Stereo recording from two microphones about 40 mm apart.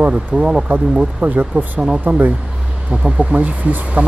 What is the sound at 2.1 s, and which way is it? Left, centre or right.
Speech, right.